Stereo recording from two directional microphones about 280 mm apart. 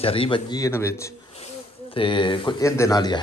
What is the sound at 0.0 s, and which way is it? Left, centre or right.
Speech, centre.